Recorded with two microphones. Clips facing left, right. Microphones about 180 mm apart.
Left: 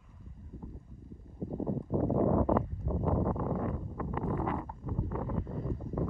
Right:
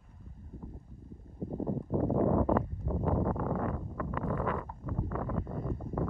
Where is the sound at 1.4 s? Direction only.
Centre (ahead or behind).